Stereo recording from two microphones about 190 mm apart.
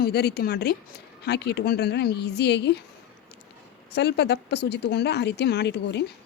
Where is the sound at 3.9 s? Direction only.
60° left (ahead or behind).